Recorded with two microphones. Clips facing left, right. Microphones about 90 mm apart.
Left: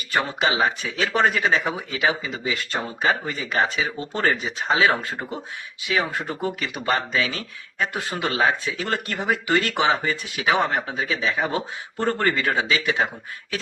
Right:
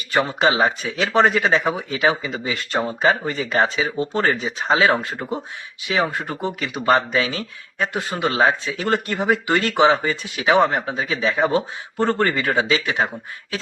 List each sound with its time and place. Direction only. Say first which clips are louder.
0.1 s speech: right 4 dB; 30° right (ahead or behind)
5.9 s speech: right 3 dB; 25° right (ahead or behind)
11.1 s speech: right 5 dB; 35° right (ahead or behind)
11.5 s speech: right 6 dB; 25° right (ahead or behind)